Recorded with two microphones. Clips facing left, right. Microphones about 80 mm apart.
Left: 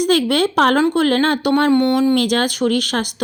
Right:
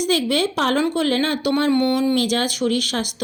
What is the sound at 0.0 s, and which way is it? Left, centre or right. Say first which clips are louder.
A woman's voice: left 4 dB; left.